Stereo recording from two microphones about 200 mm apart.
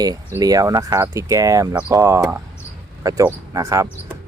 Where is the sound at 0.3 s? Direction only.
15° right (ahead or behind).